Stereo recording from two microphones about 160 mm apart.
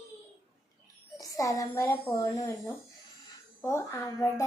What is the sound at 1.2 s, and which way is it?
Child singing, 20° left (ahead or behind).